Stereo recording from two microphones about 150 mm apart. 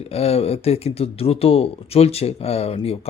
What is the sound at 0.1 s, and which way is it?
Speech, 45° left (ahead or behind).